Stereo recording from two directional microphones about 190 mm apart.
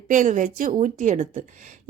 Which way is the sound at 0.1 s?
40° right (ahead or behind).